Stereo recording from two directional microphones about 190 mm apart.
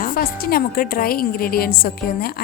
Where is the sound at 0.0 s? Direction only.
50° left (ahead or behind).